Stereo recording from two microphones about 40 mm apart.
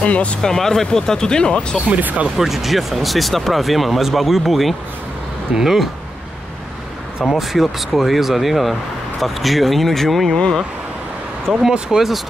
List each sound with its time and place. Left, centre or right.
0.0 s speech: left
0.4 s speech: centre
2.0 s speech: right
2.2 s speech: centre
7.3 s speech: centre
11.5 s speech: centre